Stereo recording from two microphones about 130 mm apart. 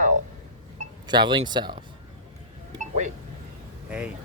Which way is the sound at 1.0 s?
35° right (ahead or behind).